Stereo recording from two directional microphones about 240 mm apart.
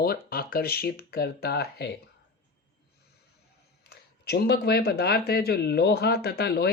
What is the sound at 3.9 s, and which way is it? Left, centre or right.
Speech, left.